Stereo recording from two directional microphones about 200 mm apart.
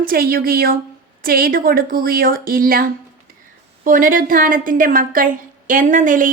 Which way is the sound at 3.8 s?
40° right (ahead or behind).